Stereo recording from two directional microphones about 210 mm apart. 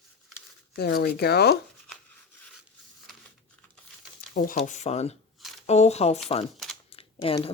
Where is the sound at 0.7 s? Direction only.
50° left (ahead or behind).